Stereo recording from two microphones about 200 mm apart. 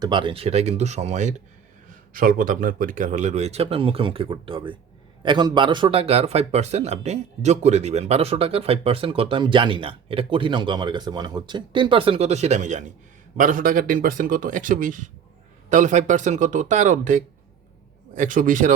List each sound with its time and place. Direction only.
0.0 s a man's voice: 25° right (ahead or behind); by 18.7 s 40° right (ahead or behind)